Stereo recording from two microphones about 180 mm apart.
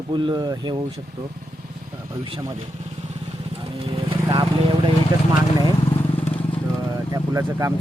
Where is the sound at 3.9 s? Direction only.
30° right (ahead or behind).